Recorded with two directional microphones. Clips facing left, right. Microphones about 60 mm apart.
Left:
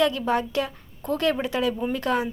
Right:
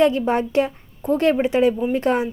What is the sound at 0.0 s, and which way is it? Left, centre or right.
Speech, right.